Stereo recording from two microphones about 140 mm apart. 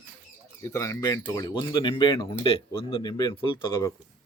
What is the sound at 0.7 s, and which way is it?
Speech, 20° left (ahead or behind).